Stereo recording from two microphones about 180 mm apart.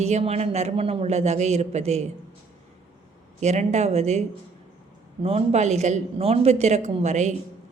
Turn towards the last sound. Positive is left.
turn(degrees=-40)  # may be behind; listen again after turning